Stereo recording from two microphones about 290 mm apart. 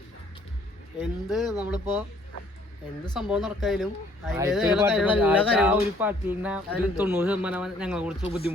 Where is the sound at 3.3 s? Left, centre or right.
Centre.